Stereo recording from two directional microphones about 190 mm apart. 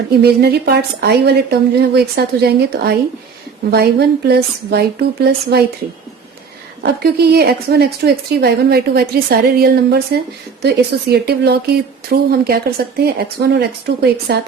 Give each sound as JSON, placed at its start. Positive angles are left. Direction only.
{"t": 0.2, "sound": "a woman's voice", "side_deg": -60}
{"t": 6.8, "sound": "a woman's voice", "side_deg": -55}